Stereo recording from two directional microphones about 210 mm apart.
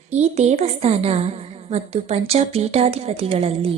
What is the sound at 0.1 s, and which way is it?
A woman's voice, 30° right (ahead or behind).